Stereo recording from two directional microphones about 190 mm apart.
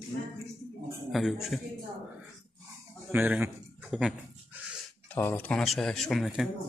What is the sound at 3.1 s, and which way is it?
Speech, 10° right (ahead or behind).